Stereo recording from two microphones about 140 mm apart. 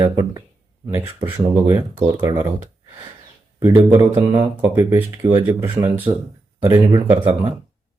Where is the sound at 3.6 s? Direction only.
25° right (ahead or behind).